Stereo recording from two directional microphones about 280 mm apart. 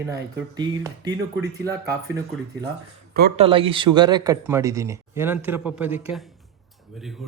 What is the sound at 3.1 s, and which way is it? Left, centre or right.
Speech, right.